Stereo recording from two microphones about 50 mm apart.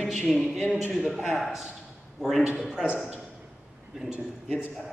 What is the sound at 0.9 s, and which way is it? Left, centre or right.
A man's voice, centre.